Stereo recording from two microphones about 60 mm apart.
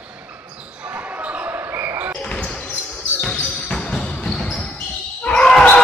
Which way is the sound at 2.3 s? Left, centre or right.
Centre.